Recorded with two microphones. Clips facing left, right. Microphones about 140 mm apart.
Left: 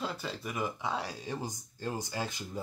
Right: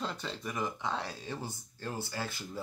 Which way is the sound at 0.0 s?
5° left (ahead or behind).